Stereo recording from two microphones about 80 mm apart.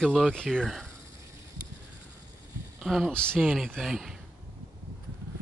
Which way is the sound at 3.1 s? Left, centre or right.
Centre.